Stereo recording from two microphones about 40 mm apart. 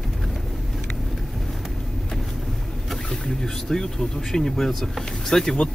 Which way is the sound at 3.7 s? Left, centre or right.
Centre.